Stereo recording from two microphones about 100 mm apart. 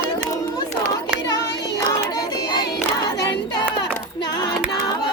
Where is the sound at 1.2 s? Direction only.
40° left (ahead or behind).